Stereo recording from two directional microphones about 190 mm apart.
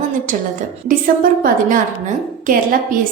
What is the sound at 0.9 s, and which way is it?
A woman's voice, 45° right (ahead or behind).